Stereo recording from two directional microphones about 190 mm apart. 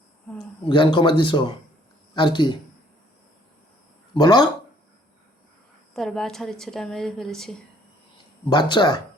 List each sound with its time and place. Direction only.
0.7 s speech: 25° left (ahead or behind)
4.1 s speech: 20° left (ahead or behind)
5.9 s a woman's voice: centre (ahead or behind)
8.4 s speech: 25° left (ahead or behind)